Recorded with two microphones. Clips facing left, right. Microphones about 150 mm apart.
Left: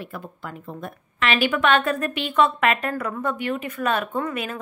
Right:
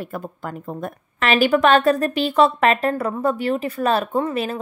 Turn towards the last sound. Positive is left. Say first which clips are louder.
# right 5 dB
turn(degrees=-30)  # may be behind; listen again after turning